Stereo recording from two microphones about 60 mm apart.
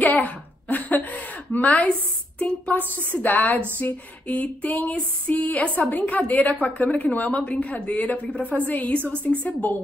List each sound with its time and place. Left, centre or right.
0.1 s a woman's voice: left